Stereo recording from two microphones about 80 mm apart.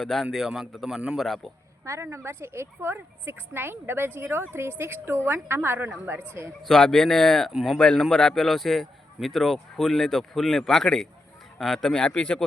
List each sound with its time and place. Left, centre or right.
0.0 s a man's voice: centre
1.8 s a woman's voice: right
6.6 s a man's voice: centre